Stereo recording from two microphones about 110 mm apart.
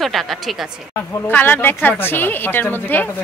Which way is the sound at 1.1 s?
20° left (ahead or behind).